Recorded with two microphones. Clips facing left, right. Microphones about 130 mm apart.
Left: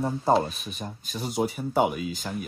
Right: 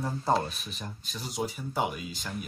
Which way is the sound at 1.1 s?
55° left (ahead or behind).